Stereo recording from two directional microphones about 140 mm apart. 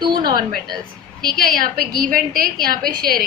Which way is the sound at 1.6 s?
90° right.